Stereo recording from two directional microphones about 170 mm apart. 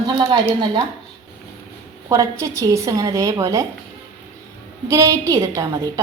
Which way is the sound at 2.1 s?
20° right (ahead or behind).